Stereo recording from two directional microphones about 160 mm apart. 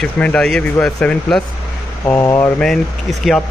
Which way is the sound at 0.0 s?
5° left (ahead or behind).